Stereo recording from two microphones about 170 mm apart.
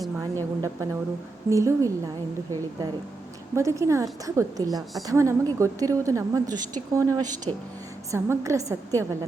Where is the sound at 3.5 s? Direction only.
15° right (ahead or behind).